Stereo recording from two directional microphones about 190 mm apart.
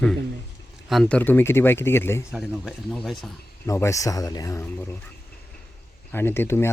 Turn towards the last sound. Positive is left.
turn(degrees=10)  # may be behind; listen again after turning